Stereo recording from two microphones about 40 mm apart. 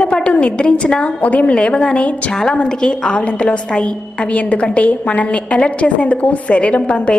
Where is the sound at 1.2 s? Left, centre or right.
Left.